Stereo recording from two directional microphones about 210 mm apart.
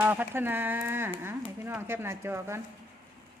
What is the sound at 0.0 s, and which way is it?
Speech, 10° right (ahead or behind).